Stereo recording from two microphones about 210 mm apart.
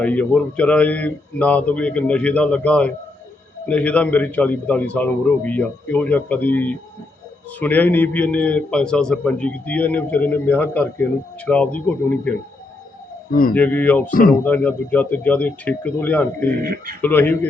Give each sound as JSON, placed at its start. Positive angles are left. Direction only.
{"t": 0.0, "sound": "a man's voice", "side_deg": 5}
{"t": 13.3, "sound": "speech", "side_deg": 45}
{"t": 13.6, "sound": "a man's voice", "side_deg": 10}